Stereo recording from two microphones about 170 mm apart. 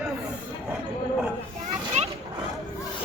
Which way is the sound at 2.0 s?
40° right (ahead or behind).